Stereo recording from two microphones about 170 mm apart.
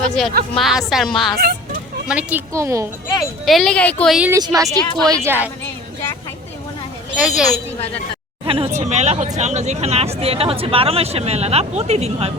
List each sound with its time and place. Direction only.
0.5 s speech: centre (ahead or behind); by 2.8 s 15° right (ahead or behind)
3.4 s speech: centre (ahead or behind)
4.3 s speech: 20° right (ahead or behind)
7.2 s speech: 5° right (ahead or behind)
8.4 s speech: 35° right (ahead or behind)